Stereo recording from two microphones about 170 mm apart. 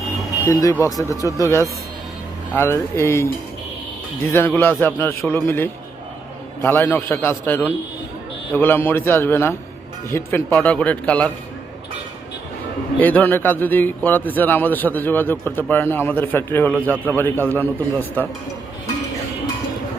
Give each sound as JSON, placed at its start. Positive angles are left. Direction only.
{"t": 0.4, "sound": "a man's voice", "side_deg": 15}
{"t": 13.0, "sound": "a man's voice", "side_deg": 10}